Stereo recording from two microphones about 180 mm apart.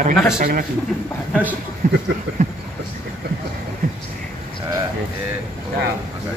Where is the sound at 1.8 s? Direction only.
40° right (ahead or behind).